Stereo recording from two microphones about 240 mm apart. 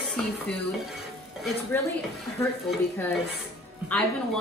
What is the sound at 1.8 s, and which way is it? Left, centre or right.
Speech, centre.